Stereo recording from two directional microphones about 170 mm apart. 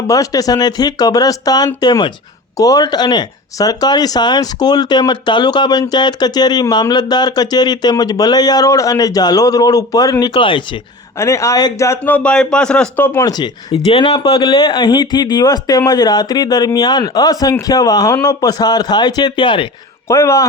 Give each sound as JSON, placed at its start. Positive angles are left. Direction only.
{"t": 0.1, "sound": "speech", "side_deg": 20}
{"t": 11.2, "sound": "speech", "side_deg": 15}
{"t": 13.8, "sound": "speech", "side_deg": 35}
{"t": 20.1, "sound": "speech", "side_deg": 15}